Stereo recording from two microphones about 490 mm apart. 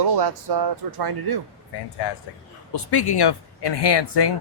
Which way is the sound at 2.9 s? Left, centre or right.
Left.